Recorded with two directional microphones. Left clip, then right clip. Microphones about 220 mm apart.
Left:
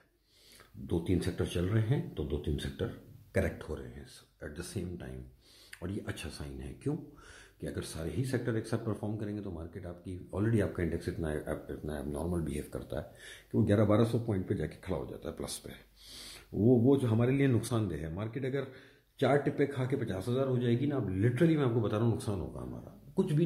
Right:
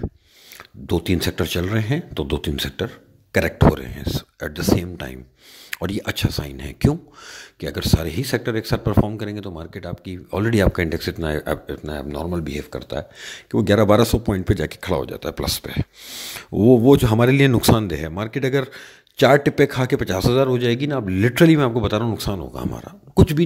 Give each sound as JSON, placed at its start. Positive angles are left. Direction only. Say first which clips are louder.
{"t": 0.8, "sound": "speech", "louder": "right 12 dB", "side_deg": -40}